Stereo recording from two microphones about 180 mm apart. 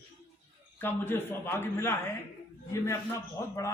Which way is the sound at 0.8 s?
10° left (ahead or behind).